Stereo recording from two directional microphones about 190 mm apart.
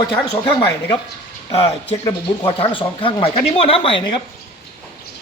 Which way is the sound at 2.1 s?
25° left (ahead or behind).